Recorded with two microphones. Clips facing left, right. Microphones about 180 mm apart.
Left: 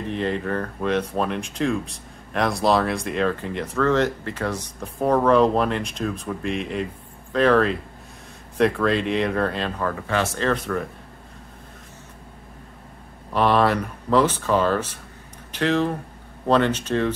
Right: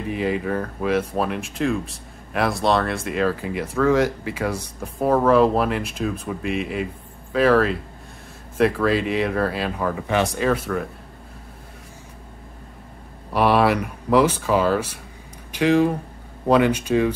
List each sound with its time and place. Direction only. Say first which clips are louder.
0.1 s speech: right 2 dB; 5° right (ahead or behind)
13.3 s speech: right 1 dB; 10° right (ahead or behind)